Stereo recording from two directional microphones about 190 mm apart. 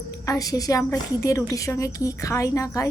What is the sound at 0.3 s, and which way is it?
A woman's voice, 20° left (ahead or behind).